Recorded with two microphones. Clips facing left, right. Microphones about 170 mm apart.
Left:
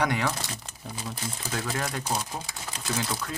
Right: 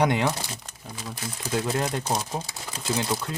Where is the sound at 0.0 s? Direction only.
20° right (ahead or behind).